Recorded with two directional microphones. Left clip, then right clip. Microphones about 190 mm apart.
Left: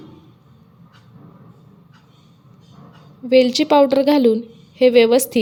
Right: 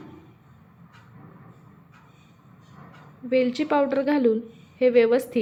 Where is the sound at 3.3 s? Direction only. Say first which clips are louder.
Left 9 dB; 30° left (ahead or behind).